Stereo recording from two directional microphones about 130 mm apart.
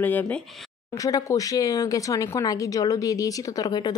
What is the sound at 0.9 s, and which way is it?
Speech, 25° left (ahead or behind).